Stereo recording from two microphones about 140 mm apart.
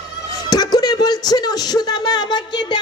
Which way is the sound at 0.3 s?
30° left (ahead or behind).